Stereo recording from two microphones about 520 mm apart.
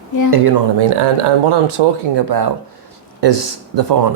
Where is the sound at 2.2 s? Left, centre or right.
Right.